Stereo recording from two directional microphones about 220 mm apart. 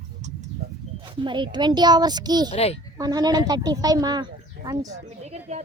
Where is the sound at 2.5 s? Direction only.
30° left (ahead or behind).